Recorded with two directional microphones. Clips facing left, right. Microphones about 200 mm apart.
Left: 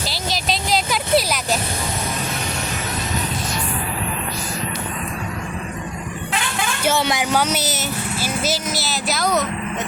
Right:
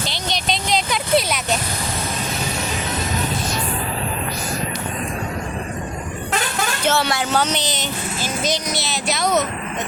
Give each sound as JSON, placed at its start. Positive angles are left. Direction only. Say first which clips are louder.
{"t": 0.1, "sound": "a sound", "louder": "left 2 dB", "side_deg": 5}
{"t": 6.3, "sound": "vehicle", "louder": "right 2 dB", "side_deg": -45}
{"t": 6.8, "sound": "speech", "louder": "left 1 dB", "side_deg": 15}